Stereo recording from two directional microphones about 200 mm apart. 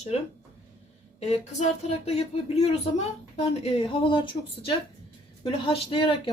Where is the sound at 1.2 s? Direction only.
35° left (ahead or behind).